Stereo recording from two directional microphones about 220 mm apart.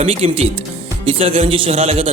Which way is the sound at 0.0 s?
30° right (ahead or behind).